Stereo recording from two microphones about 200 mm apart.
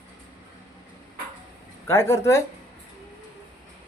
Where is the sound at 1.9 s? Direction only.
10° left (ahead or behind).